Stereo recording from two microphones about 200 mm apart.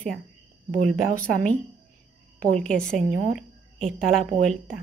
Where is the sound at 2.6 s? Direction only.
5° left (ahead or behind).